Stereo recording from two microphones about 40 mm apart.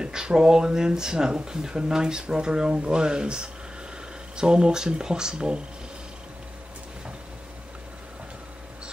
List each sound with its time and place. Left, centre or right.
0.0 s speech: centre